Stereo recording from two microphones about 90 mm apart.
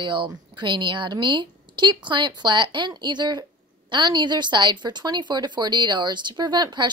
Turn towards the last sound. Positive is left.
turn(degrees=-55)  # may be behind; listen again after turning